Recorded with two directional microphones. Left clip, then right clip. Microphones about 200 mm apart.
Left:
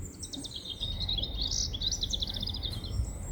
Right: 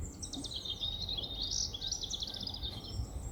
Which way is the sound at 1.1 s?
35° right (ahead or behind).